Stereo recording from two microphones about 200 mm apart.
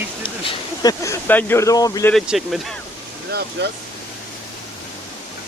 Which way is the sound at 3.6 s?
55° right (ahead or behind).